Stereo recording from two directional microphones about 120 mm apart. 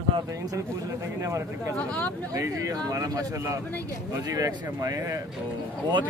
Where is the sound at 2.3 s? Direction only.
30° right (ahead or behind).